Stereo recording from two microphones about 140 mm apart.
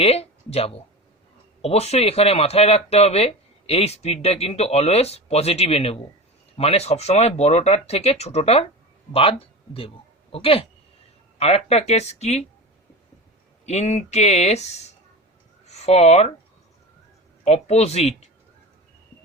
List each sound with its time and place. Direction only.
0.0 s speech: 45° left (ahead or behind)
10.3 s speech: 40° left (ahead or behind)
13.7 s speech: 50° left (ahead or behind)
17.4 s speech: 50° left (ahead or behind)